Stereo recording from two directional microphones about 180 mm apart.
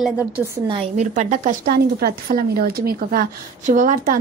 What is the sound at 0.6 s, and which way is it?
Speech, 30° right (ahead or behind).